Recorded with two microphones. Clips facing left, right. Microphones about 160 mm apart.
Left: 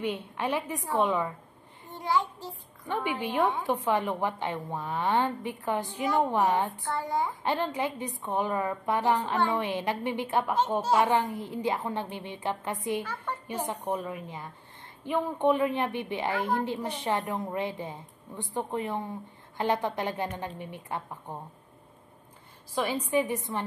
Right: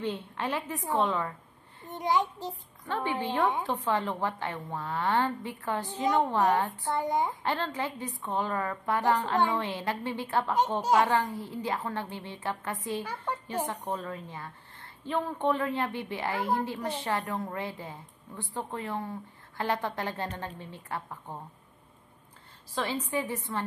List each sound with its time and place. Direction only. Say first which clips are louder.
0.0 s a woman's voice: left 2 dB; 10° left (ahead or behind)
1.9 s a child's voice: right 1 dB; 20° right (ahead or behind)
2.9 s a woman's voice: even; 15° left (ahead or behind)
6.8 s a child's voice: right 1 dB; 20° right (ahead or behind)
7.4 s a woman's voice: left 2 dB; 15° left (ahead or behind)
13.0 s a woman's voice: right 1 dB; 10° right (ahead or behind)
13.7 s a woman's voice: left 2 dB; 15° left (ahead or behind)
22.8 s a woman's voice: left 4 dB; 15° left (ahead or behind)